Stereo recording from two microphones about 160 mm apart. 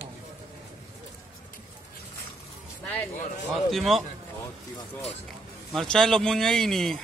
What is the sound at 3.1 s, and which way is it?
Speech, 50° left (ahead or behind).